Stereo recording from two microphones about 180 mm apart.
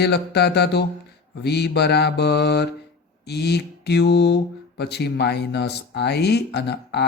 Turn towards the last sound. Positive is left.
turn(degrees=70)  # may be behind; listen again after turning